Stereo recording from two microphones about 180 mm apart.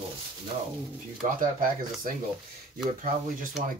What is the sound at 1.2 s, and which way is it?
Speech, 50° right (ahead or behind).